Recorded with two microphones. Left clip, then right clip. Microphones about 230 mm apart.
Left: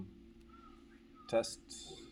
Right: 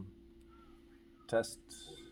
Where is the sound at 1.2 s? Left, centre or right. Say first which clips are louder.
Even; right.